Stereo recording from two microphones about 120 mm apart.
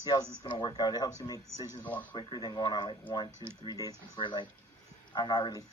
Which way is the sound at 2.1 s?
40° left (ahead or behind).